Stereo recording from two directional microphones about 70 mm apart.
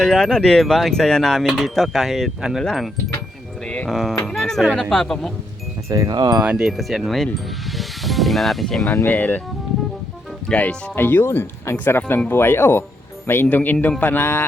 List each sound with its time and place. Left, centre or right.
0.0 s speech: centre
4.3 s music: centre
4.6 s speech: centre
5.9 s wind chime: right
6.4 s speech: centre
6.7 s speech: centre
9.0 s a man's voice: left
10.5 s speech: centre
10.9 s a man's voice: left